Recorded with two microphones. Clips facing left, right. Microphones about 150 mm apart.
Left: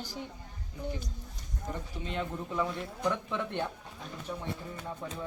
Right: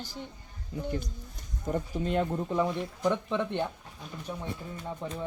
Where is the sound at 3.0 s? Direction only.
20° right (ahead or behind).